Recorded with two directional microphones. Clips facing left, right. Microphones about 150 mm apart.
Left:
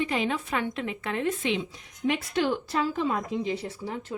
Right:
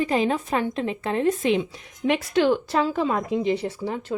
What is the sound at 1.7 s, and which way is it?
Speech, 90° right.